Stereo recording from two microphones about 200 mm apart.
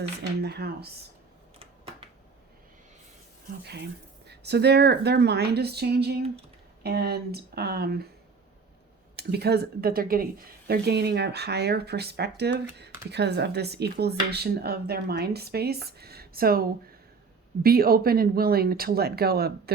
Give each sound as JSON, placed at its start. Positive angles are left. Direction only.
{"t": 0.4, "sound": "speech", "side_deg": -50}
{"t": 3.6, "sound": "a woman's voice", "side_deg": -55}
{"t": 9.1, "sound": "speech", "side_deg": -55}